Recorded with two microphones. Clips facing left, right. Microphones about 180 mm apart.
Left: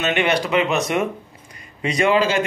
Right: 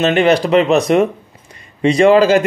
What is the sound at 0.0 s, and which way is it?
A man's voice, 35° right (ahead or behind).